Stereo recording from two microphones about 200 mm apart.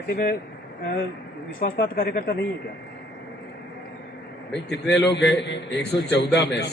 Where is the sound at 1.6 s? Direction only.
45° left (ahead or behind).